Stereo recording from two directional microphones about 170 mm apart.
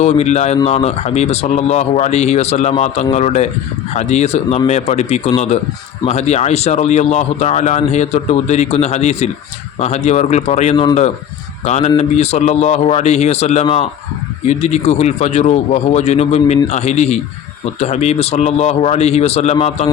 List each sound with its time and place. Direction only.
0.0 s speech: 40° left (ahead or behind)